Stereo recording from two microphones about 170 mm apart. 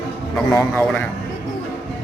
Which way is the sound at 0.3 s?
15° left (ahead or behind).